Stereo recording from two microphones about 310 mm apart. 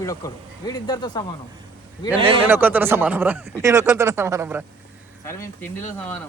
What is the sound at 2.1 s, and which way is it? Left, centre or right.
Speech, centre.